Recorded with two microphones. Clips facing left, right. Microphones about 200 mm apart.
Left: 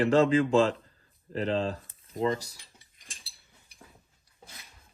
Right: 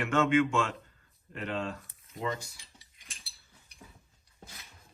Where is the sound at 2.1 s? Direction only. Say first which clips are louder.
Left 9 dB; 30° left (ahead or behind).